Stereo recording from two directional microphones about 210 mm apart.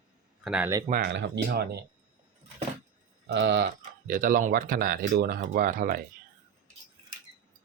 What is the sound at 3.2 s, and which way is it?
Speech, 55° right (ahead or behind).